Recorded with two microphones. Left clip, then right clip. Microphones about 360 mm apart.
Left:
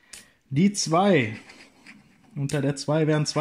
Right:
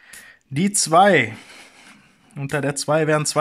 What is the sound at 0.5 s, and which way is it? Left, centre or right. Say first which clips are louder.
Speech: right 7 dB; centre.